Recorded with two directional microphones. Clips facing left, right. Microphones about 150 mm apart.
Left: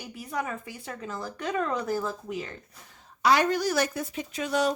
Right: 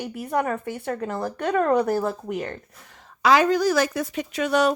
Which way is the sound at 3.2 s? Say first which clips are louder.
Right 5 dB; 90° right.